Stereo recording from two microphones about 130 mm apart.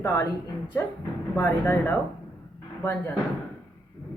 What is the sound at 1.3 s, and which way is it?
Speech, 15° left (ahead or behind).